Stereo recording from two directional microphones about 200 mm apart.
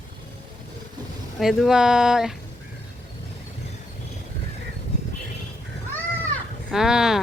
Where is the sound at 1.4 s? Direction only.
Centre (ahead or behind).